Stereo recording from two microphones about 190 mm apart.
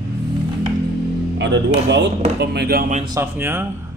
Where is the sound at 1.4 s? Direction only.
70° right (ahead or behind).